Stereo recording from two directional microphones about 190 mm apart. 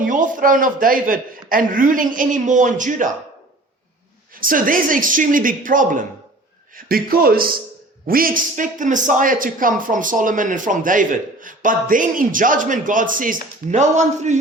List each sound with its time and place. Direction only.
0.0 s a man's voice: 45° right (ahead or behind)
4.4 s a man's voice: 45° right (ahead or behind)